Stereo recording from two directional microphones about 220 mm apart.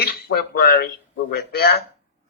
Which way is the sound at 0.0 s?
45° left (ahead or behind).